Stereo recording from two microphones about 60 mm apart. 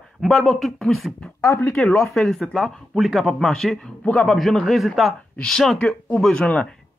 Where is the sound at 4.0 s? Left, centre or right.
Left.